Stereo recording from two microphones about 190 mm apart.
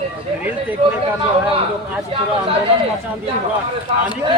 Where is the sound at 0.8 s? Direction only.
30° right (ahead or behind).